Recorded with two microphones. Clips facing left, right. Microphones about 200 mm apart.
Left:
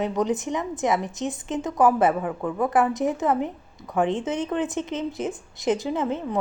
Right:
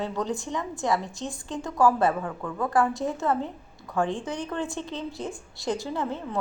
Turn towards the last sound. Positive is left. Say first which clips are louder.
# left 5 dB
turn(degrees=20)  # may be behind; listen again after turning